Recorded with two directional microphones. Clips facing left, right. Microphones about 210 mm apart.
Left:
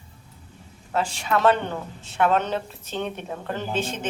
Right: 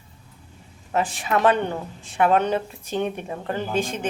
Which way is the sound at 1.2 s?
15° right (ahead or behind).